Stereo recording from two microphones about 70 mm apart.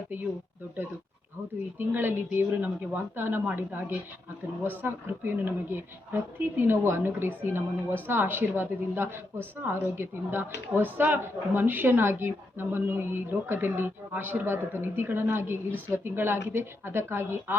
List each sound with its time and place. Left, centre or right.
1.8 s a woman's voice: right